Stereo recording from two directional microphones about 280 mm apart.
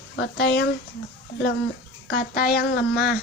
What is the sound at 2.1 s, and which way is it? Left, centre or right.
Speech, left.